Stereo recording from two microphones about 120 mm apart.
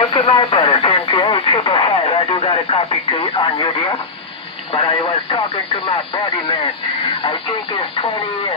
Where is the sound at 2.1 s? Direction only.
35° left (ahead or behind).